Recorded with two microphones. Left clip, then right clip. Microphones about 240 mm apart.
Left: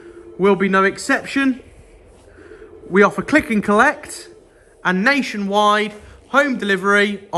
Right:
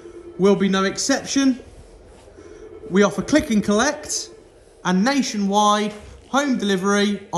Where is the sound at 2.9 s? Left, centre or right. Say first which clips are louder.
Left 4 dB; centre.